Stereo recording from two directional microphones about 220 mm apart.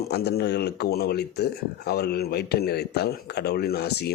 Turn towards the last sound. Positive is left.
turn(degrees=45)  # may be behind; listen again after turning